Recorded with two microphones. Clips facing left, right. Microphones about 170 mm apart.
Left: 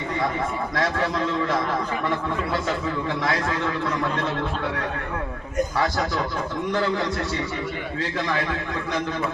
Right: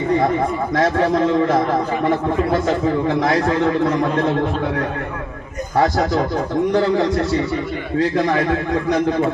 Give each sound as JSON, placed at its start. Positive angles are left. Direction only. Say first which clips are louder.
{"t": 0.8, "sound": "a man's voice", "louder": "right 8 dB", "side_deg": -45}
{"t": 5.7, "sound": "a man's voice", "louder": "right 12 dB", "side_deg": -45}